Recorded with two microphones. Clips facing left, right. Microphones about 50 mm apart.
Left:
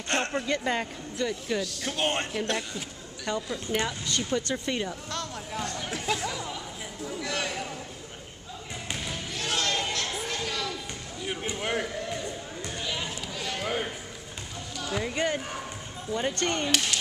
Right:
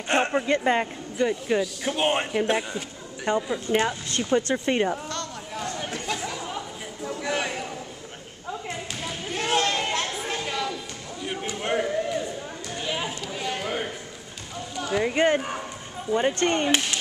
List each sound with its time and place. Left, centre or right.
0.1 s speech: centre
1.6 s speech: centre; by 4.9 s right
5.1 s a sound: centre
5.6 s chatter: centre
5.9 s chatter: centre
6.2 s chatter: centre
7.1 s a sound: centre
9.3 s a sound: right
11.5 s run: centre
12.7 s run: centre
14.8 s speech: right